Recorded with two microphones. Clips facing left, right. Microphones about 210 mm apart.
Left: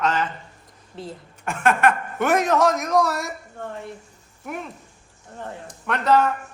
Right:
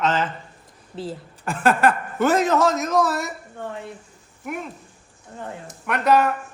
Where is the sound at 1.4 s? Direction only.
35° right (ahead or behind).